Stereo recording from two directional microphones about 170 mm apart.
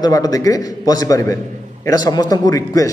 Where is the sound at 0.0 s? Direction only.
20° left (ahead or behind).